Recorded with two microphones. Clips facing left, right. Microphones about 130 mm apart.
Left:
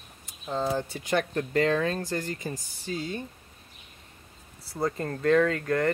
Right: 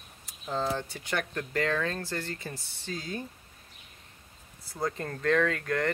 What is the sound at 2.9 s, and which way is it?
Speech, centre (ahead or behind).